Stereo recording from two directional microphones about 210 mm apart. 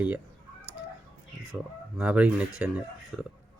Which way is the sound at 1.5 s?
5° right (ahead or behind).